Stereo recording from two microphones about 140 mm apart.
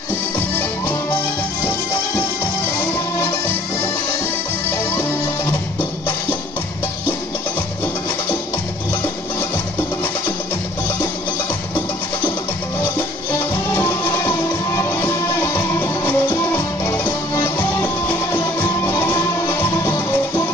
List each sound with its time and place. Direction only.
4.9 s music: 25° left (ahead or behind)
13.7 s music: 20° left (ahead or behind)